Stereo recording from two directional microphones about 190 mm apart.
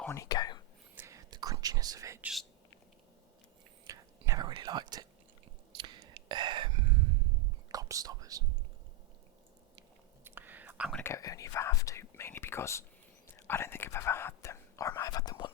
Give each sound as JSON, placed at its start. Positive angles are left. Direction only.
{"t": 0.0, "sound": "speech", "side_deg": 15}
{"t": 0.9, "sound": "whispering", "side_deg": -15}
{"t": 3.8, "sound": "whispering", "side_deg": -20}
{"t": 7.7, "sound": "speech", "side_deg": -20}
{"t": 10.2, "sound": "whispering", "side_deg": -10}
{"t": 10.9, "sound": "speech", "side_deg": 15}
{"t": 13.3, "sound": "whispering", "side_deg": 15}